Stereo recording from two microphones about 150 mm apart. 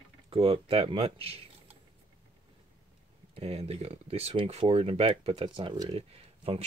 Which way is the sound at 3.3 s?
40° right (ahead or behind).